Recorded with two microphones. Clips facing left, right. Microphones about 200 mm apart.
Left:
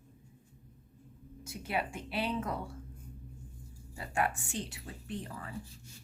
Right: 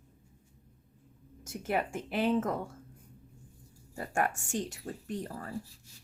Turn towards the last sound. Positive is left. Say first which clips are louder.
# right 4 dB
turn(degrees=-45)  # may be behind; listen again after turning